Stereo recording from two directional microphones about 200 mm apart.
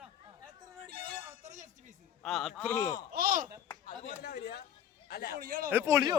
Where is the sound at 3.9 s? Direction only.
50° left (ahead or behind).